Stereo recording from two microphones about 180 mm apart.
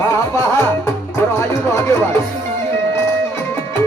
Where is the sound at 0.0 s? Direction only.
15° left (ahead or behind).